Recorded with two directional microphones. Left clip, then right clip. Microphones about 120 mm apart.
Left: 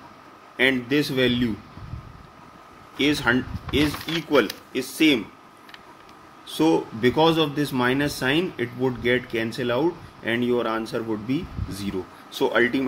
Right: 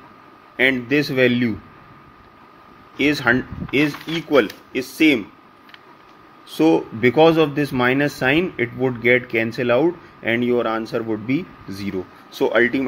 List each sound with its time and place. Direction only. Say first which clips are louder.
0.6 s speech: right 3 dB; 50° right (ahead or behind)
3.0 s speech: right 4 dB; 50° right (ahead or behind)
6.6 s speech: right 4 dB; 45° right (ahead or behind)
8.4 s speech: right 4 dB; 40° right (ahead or behind)